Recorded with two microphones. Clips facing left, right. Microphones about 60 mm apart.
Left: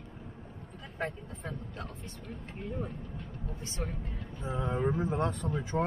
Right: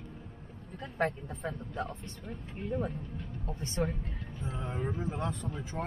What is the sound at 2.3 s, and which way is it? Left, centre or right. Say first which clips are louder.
Music: right 4 dB; centre.